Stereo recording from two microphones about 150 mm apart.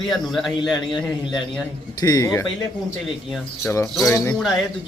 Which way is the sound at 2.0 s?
25° left (ahead or behind).